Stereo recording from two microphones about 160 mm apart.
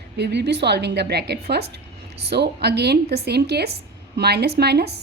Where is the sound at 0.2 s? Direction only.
90° right.